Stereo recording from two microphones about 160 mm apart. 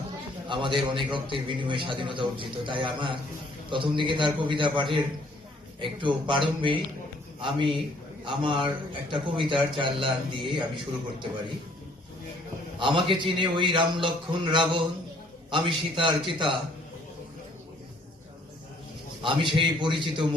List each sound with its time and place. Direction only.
0.4 s a man's voice: 30° right (ahead or behind)
12.8 s a man's voice: 30° right (ahead or behind)
19.2 s a man's voice: 30° right (ahead or behind)